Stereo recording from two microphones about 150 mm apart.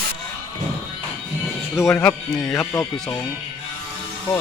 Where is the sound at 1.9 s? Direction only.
5° left (ahead or behind).